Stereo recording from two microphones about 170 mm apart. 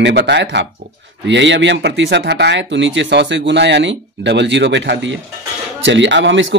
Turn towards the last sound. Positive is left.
turn(degrees=-90)